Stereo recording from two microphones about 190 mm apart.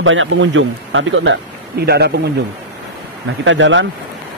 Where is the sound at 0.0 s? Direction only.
90° right; by 2.1 s 60° right (ahead or behind).